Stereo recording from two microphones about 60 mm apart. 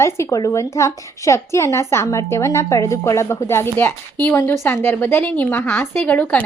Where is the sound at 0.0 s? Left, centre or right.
Left.